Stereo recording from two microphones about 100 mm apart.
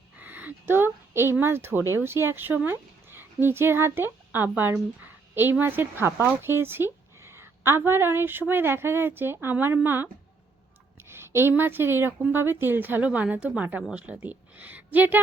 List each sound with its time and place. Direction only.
0.2 s a woman's voice: 15° right (ahead or behind)
11.1 s a woman's voice: 25° right (ahead or behind)